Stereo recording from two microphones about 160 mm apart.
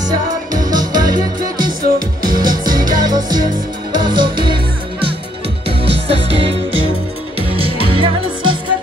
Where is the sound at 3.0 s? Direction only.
25° right (ahead or behind).